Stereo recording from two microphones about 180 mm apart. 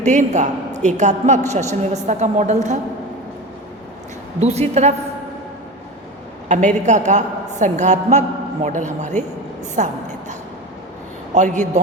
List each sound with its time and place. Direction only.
0.0 s a woman's voice: 40° right (ahead or behind)
4.4 s a woman's voice: 35° right (ahead or behind)
6.5 s a woman's voice: 40° right (ahead or behind)
9.7 s a sound: 40° right (ahead or behind)
11.3 s a woman's voice: 40° right (ahead or behind)